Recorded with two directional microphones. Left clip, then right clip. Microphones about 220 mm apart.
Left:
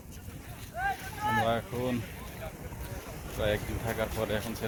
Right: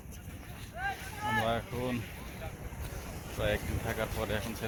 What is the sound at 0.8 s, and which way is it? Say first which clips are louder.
Vehicle: left 4 dB; 50° left (ahead or behind).